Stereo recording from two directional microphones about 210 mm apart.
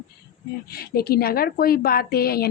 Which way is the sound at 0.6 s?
50° left (ahead or behind).